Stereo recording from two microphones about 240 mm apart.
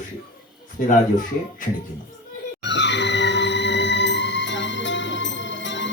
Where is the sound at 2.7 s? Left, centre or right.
Left.